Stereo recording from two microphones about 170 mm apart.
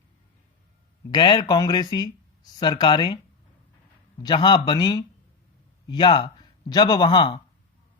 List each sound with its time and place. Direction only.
1.1 s speech: 25° left (ahead or behind)
4.2 s speech: 25° left (ahead or behind)